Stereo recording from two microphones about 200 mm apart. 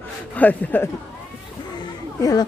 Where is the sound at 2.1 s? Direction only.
20° left (ahead or behind).